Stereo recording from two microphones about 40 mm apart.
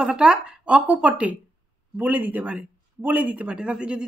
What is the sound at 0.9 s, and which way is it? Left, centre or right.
Speech, right.